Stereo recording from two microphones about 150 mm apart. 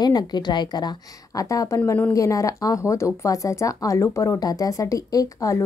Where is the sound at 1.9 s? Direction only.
10° left (ahead or behind).